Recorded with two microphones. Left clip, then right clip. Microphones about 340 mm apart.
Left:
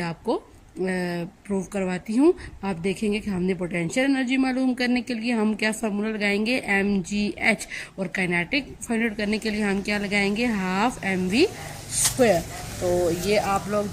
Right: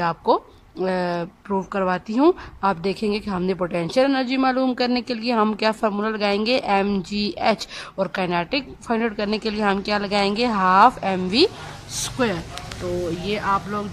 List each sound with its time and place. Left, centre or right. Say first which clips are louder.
0.0 s a woman's voice: right 8 dB; right
11.9 s speech: left 4 dB; centre